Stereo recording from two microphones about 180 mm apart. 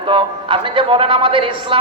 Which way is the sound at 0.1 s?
30° right (ahead or behind).